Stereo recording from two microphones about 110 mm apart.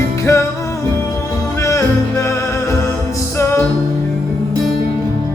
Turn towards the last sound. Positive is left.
turn(degrees=20)  # may be behind; listen again after turning